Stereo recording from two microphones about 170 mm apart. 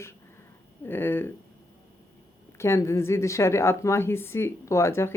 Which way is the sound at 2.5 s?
15° left (ahead or behind).